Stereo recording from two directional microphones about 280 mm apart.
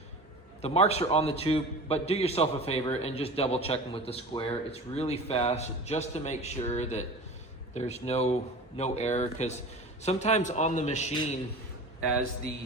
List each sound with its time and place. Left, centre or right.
0.6 s a man's voice: left